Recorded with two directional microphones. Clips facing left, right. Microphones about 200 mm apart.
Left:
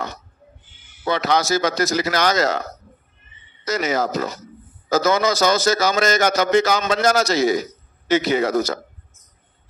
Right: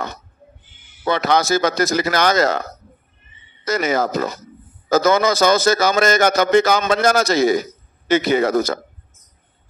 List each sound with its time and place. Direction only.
1.0 s a man's voice: 55° right (ahead or behind)
3.6 s a man's voice: 55° right (ahead or behind)